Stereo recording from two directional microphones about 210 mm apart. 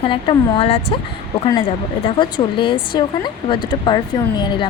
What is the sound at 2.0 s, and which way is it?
Speech, 25° left (ahead or behind).